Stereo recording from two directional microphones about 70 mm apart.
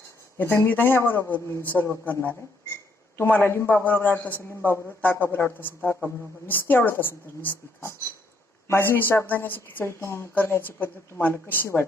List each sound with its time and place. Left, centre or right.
0.3 s a man's voice: left
9.8 s a man's voice: left